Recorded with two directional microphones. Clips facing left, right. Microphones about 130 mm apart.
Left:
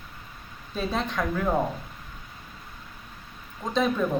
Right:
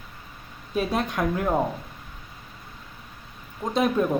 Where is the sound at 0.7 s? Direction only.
10° right (ahead or behind).